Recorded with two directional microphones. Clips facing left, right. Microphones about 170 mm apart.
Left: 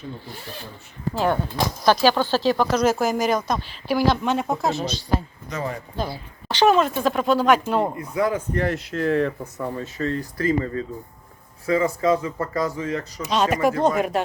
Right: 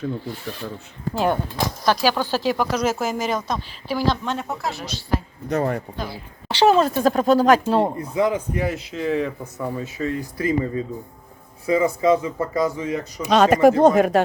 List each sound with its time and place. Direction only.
1.1 s speech: 15° right (ahead or behind)
1.8 s speech: centre (ahead or behind); by 4.9 s 20° left (ahead or behind)
5.5 s speech: 60° right (ahead or behind)
6.5 s speech: 30° right (ahead or behind)
8.5 s speech: 5° right (ahead or behind)
13.2 s speech: 55° right (ahead or behind)